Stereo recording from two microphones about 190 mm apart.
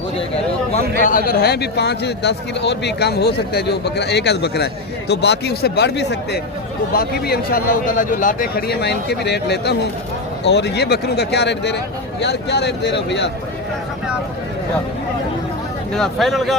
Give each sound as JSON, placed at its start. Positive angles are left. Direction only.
{"t": 0.7, "sound": "a man's voice", "side_deg": 45}
{"t": 6.9, "sound": "a man's voice", "side_deg": 55}
{"t": 16.0, "sound": "speech", "side_deg": 0}